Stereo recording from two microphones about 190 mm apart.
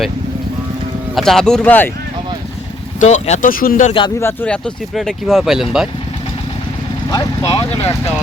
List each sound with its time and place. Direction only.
1.1 s speech: centre (ahead or behind)
3.0 s speech: 40° left (ahead or behind)
4.2 s speech: 10° left (ahead or behind)
7.1 s speech: 20° left (ahead or behind)